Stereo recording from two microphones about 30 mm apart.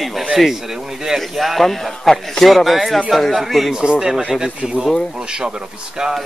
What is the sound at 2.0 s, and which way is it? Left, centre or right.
Speech, centre.